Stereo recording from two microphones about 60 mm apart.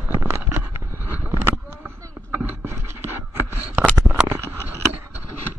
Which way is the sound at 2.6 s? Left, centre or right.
Right.